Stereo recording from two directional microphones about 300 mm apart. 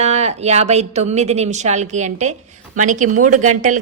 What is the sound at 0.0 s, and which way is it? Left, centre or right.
A woman's voice, right.